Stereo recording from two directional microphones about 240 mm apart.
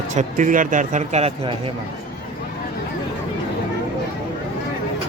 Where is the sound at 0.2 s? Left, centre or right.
Right.